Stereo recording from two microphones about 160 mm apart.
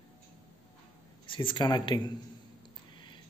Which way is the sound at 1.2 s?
30° left (ahead or behind).